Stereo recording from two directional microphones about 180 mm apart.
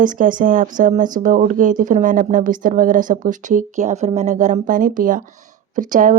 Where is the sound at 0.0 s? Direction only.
45° right (ahead or behind).